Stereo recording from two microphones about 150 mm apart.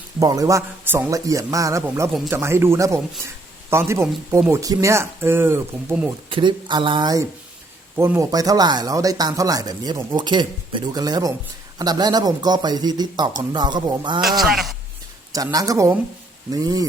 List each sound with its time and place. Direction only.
0.2 s speech: 25° right (ahead or behind)
6.3 s speech: 30° right (ahead or behind)
7.9 s speech: 15° right (ahead or behind)
14.4 s speech: centre (ahead or behind)
15.5 s speech: 20° right (ahead or behind)